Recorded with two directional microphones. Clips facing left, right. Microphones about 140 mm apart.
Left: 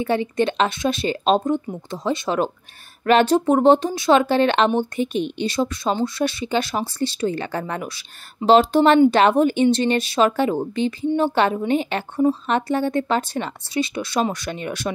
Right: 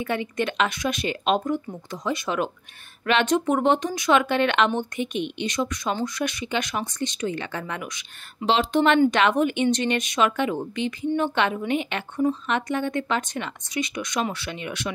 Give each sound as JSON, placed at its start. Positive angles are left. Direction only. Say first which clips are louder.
{"t": 0.0, "sound": "speech", "louder": "left 6 dB", "side_deg": 30}